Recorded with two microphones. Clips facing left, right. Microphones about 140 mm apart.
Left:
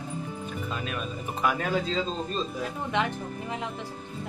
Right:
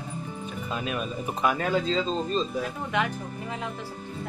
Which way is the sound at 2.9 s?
25° left (ahead or behind).